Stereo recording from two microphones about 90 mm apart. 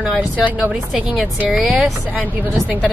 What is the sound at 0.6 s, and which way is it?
Speech, 10° right (ahead or behind).